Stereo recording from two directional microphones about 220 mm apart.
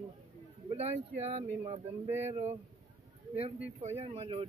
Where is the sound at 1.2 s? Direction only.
30° right (ahead or behind).